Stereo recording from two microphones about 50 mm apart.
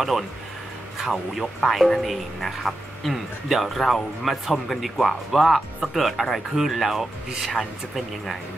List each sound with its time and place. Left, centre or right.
1.1 s speech: centre